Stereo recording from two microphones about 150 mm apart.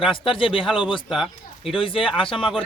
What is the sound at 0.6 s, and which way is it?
Speech, 5° right (ahead or behind).